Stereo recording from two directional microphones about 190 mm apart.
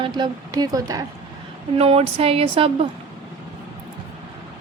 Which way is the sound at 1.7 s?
30° right (ahead or behind).